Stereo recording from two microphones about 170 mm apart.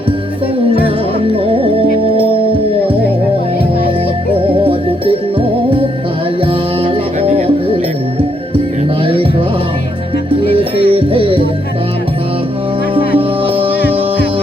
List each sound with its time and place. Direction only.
4.4 s music: 30° right (ahead or behind)
10.5 s music: 30° right (ahead or behind)
12.9 s music: 35° right (ahead or behind)